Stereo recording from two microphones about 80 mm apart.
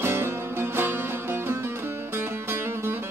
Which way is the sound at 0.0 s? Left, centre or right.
Right.